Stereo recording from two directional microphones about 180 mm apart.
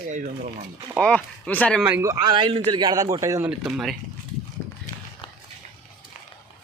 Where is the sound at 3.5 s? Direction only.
5° right (ahead or behind).